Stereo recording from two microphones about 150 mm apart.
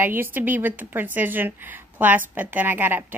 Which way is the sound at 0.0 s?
15° right (ahead or behind).